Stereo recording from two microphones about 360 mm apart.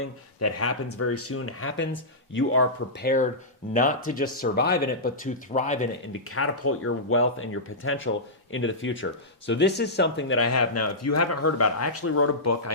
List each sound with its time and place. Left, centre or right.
0.0 s speech: left
3.7 s speech: left
6.3 s speech: left